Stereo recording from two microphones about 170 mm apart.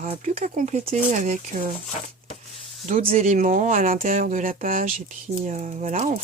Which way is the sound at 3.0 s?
50° right (ahead or behind).